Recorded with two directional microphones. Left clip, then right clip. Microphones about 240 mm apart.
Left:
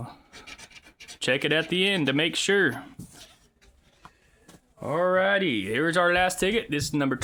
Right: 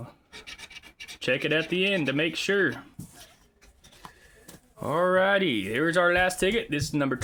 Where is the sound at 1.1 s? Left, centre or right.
Centre.